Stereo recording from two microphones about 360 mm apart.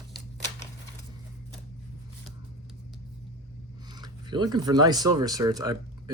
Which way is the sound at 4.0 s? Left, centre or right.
Centre.